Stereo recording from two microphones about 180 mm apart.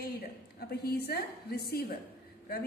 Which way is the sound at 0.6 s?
60° left (ahead or behind).